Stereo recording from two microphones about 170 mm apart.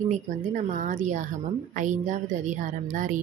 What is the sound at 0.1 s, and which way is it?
Speech, 45° right (ahead or behind).